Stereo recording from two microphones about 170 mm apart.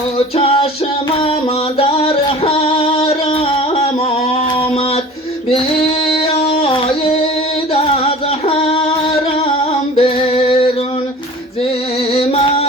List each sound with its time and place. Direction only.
0.3 s music: 35° left (ahead or behind)
1.9 s music: 35° left (ahead or behind)
5.5 s female singing: 35° left (ahead or behind)
8.4 s female singing: 35° left (ahead or behind)
9.9 s music: 35° left (ahead or behind)
12.1 s music: 35° left (ahead or behind)